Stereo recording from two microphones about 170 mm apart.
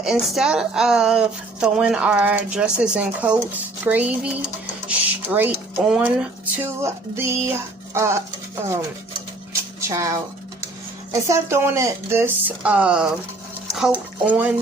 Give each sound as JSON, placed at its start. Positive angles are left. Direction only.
{"t": 0.0, "sound": "speech", "side_deg": 0}
{"t": 9.5, "sound": "a sound", "side_deg": -15}
{"t": 11.3, "sound": "speech", "side_deg": -15}